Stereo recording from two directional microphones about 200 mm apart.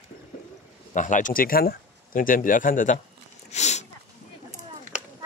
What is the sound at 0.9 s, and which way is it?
Speech, 40° left (ahead or behind).